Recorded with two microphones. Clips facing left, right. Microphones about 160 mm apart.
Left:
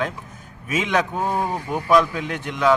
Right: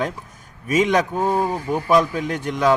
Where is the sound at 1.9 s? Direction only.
35° right (ahead or behind).